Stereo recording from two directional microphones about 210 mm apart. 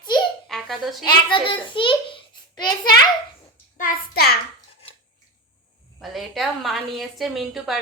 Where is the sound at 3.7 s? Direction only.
45° left (ahead or behind).